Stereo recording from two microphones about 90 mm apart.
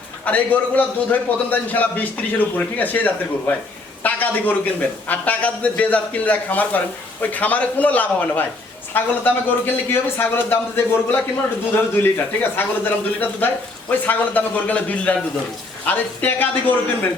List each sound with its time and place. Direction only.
0.3 s a man's voice: 15° left (ahead or behind)
4.0 s a sound: 20° left (ahead or behind)
5.0 s a man's voice: 20° left (ahead or behind)